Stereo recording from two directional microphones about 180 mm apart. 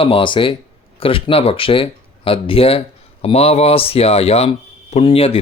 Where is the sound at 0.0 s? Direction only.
30° left (ahead or behind).